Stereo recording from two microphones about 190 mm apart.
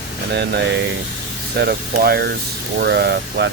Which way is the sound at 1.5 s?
55° right (ahead or behind).